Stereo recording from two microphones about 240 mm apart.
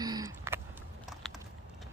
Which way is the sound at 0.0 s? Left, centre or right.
Centre.